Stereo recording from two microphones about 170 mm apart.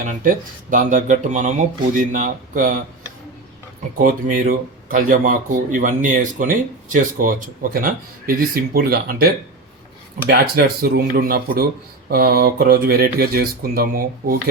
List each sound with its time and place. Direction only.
0.0 s a man's voice: 50° right (ahead or behind)
3.9 s a man's voice: 55° right (ahead or behind)